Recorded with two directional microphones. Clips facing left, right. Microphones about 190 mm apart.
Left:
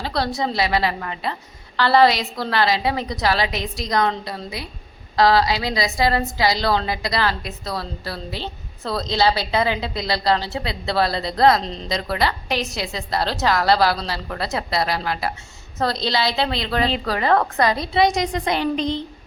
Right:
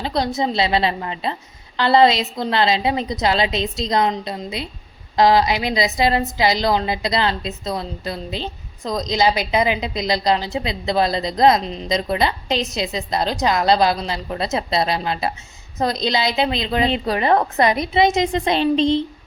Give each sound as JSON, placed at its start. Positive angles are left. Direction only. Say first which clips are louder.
{"t": 0.0, "sound": "a woman's voice", "louder": "right 2 dB", "side_deg": -20}